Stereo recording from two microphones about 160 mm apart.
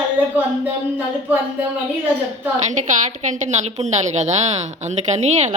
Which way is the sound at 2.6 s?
50° right (ahead or behind).